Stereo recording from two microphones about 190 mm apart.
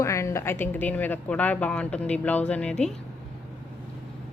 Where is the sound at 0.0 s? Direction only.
15° left (ahead or behind).